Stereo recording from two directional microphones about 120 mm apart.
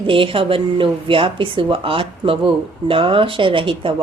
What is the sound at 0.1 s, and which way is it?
Speech, 45° right (ahead or behind).